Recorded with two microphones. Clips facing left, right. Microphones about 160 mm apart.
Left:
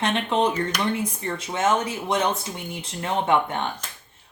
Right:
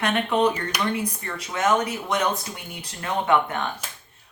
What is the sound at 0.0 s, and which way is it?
Speech, 25° left (ahead or behind).